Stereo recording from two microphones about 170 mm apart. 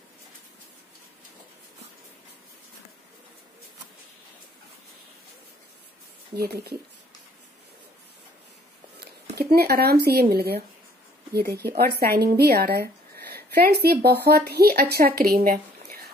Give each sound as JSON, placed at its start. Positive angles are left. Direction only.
{"t": 6.3, "sound": "a woman's voice", "side_deg": -70}
{"t": 9.0, "sound": "a woman's voice", "side_deg": -70}